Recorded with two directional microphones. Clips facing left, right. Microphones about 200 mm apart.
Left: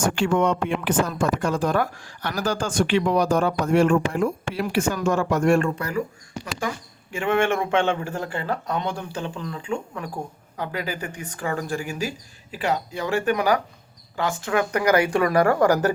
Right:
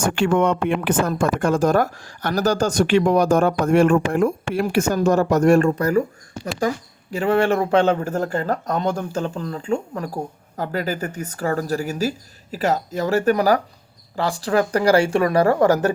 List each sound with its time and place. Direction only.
0.0 s speech: 55° right (ahead or behind); by 15.9 s 25° right (ahead or behind)